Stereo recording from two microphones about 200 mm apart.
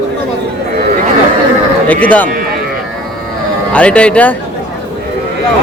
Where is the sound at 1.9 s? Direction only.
5° left (ahead or behind).